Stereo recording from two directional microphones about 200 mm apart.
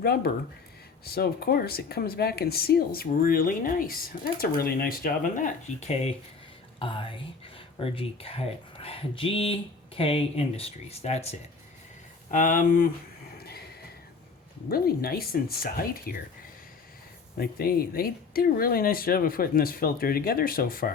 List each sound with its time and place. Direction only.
0.0 s speech: 50° left (ahead or behind); by 11.3 s 30° left (ahead or behind)
12.3 s speech: 45° left (ahead or behind)
14.7 s speech: 50° left (ahead or behind)
17.3 s speech: 50° left (ahead or behind)